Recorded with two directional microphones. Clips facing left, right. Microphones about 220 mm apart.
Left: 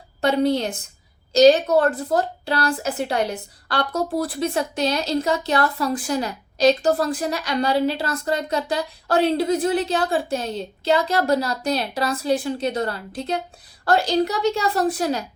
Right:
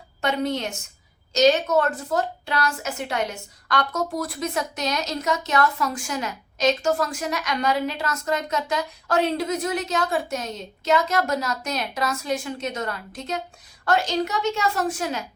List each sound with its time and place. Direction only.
0.2 s a woman's voice: 35° left (ahead or behind)